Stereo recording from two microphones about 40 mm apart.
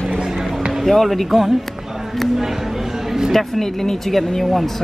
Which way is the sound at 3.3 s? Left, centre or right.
Centre.